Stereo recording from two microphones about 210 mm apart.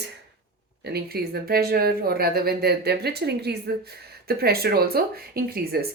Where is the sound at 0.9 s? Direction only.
50° right (ahead or behind).